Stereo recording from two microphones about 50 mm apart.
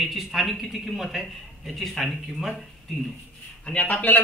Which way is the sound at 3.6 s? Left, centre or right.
Left.